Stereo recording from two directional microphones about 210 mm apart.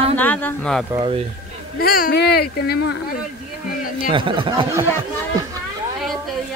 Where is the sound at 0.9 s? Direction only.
25° right (ahead or behind).